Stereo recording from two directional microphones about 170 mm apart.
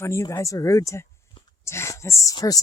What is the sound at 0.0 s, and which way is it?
Speech, 15° left (ahead or behind).